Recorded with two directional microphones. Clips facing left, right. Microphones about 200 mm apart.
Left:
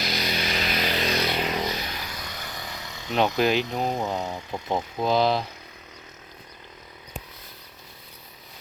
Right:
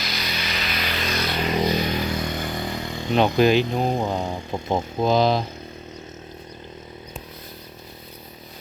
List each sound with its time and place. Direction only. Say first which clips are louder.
0.0 s a sound: left 2 dB; 50° left (ahead or behind); by 1.1 s 35° left (ahead or behind)
1.1 s a sound: left 1 dB; 15° left (ahead or behind)
1.5 s motorcycle: right 8 dB; 15° right (ahead or behind)
3.3 s speech: right 7 dB; centre (ahead or behind)
3.7 s speech: right 4 dB; 25° right (ahead or behind)
4.0 s speech: right 3 dB; 5° left (ahead or behind)
4.3 s speech: right 4 dB; 25° right (ahead or behind)
5.1 s speech: right 2 dB; 5° left (ahead or behind)